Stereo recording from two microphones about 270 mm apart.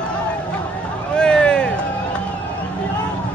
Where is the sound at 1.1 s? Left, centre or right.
Centre.